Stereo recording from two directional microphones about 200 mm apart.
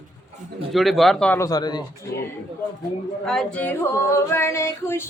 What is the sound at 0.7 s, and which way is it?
Female singing, centre (ahead or behind).